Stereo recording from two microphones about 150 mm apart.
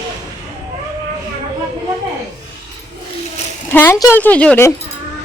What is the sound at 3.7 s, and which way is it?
Speech, 15° left (ahead or behind).